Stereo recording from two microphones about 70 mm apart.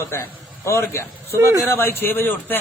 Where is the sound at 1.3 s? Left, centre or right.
Right.